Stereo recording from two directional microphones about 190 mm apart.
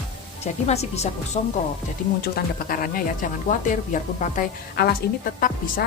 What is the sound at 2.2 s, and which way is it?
Speech, 50° left (ahead or behind).